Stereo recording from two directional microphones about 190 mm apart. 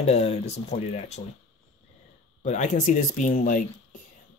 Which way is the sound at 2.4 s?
40° left (ahead or behind).